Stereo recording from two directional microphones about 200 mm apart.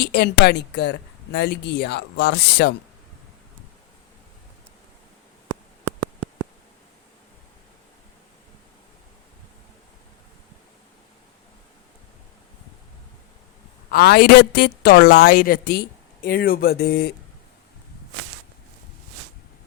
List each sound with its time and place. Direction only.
0.0 s speech: 50° left (ahead or behind)
13.9 s a woman's voice: 50° left (ahead or behind)